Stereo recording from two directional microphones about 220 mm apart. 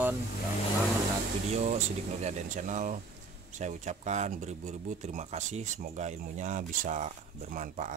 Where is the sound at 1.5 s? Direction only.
30° right (ahead or behind).